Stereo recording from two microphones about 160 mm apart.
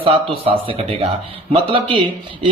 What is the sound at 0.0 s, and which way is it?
A man's voice, 35° right (ahead or behind).